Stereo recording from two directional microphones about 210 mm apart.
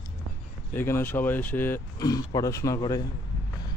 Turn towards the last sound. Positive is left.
turn(degrees=20)  # may be behind; listen again after turning